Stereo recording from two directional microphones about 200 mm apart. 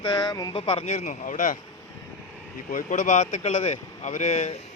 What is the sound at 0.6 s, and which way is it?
Speech, 30° left (ahead or behind).